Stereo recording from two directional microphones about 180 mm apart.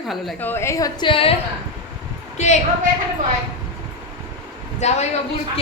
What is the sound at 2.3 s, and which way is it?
Speech, 40° left (ahead or behind).